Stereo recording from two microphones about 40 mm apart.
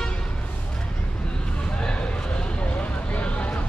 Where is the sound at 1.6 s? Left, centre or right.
Left.